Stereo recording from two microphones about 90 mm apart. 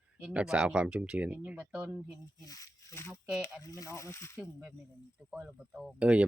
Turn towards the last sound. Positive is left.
turn(degrees=-15)  # may be behind; listen again after turning